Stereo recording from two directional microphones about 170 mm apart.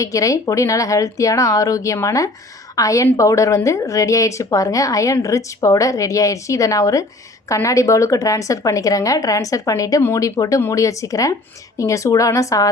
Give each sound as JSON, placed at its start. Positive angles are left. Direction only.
{"t": 0.0, "sound": "a woman's voice", "side_deg": 20}